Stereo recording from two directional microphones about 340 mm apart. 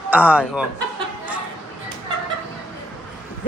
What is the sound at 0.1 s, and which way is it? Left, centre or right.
Speech, centre.